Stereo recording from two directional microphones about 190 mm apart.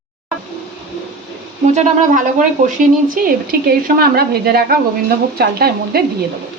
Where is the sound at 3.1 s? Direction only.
50° right (ahead or behind).